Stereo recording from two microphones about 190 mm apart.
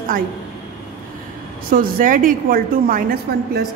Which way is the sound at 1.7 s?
45° right (ahead or behind).